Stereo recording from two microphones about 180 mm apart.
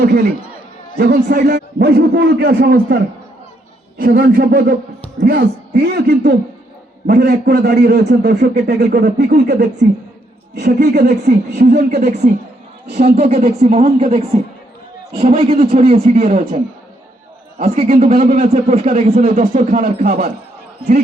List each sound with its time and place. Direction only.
0.0 s a man's voice: 55° right (ahead or behind)
10.9 s a man's voice: 60° right (ahead or behind)
11.9 s speech: 45° right (ahead or behind)
17.6 s speech: 40° right (ahead or behind)